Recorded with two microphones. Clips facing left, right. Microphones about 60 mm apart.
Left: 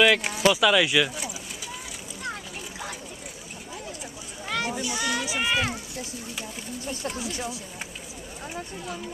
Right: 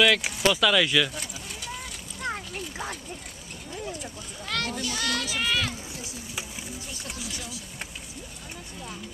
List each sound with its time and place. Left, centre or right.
0.2 s speech: centre
2.2 s splash: right
4.0 s children playing: centre
7.2 s speech: left